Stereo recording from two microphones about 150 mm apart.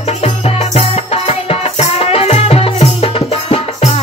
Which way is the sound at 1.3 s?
40° left (ahead or behind).